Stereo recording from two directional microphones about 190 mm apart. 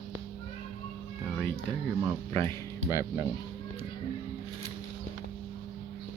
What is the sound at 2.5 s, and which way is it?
Speech, 15° left (ahead or behind).